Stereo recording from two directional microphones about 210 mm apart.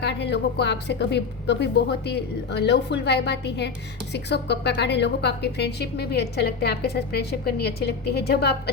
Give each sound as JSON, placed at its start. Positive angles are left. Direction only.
{"t": 0.0, "sound": "a woman's voice", "side_deg": 55}